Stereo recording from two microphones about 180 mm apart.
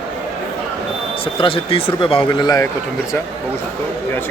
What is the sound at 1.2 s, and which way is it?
Speech, 30° left (ahead or behind).